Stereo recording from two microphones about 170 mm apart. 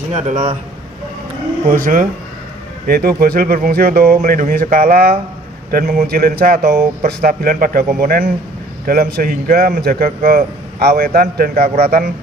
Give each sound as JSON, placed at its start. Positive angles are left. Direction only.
{"t": 0.1, "sound": "speech", "side_deg": -45}
{"t": 1.6, "sound": "a man's voice", "side_deg": -50}